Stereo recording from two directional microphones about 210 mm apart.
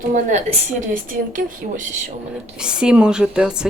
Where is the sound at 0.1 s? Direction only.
35° right (ahead or behind).